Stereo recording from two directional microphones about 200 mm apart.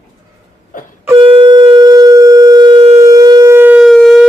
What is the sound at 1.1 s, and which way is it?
Shofar, 25° right (ahead or behind).